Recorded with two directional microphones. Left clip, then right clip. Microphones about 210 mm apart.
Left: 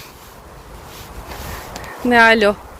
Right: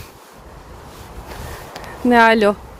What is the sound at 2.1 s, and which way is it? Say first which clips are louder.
Speech: left 1 dB; 25° right (ahead or behind).